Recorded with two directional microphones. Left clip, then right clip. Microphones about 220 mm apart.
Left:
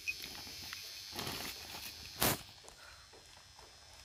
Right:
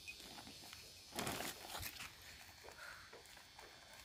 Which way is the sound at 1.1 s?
20° right (ahead or behind).